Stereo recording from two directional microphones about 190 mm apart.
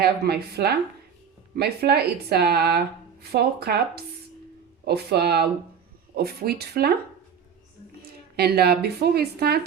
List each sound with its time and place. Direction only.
0.0 s speech: 55° right (ahead or behind)
8.4 s speech: 55° right (ahead or behind)